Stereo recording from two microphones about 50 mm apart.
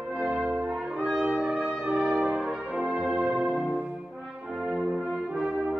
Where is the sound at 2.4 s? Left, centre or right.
Centre.